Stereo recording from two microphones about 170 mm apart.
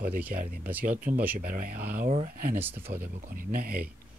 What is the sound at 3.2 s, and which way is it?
Speech, 60° right (ahead or behind).